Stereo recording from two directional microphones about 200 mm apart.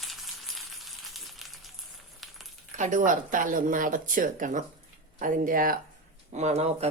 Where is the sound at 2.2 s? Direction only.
Centre (ahead or behind).